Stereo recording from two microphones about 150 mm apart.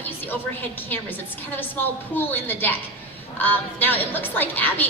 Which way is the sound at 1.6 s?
15° left (ahead or behind).